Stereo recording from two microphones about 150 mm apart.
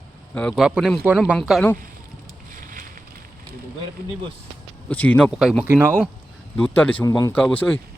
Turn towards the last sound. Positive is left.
turn(degrees=10)  # may be behind; listen again after turning